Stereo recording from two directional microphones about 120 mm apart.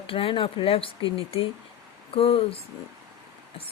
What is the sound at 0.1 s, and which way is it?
Speech, 50° left (ahead or behind).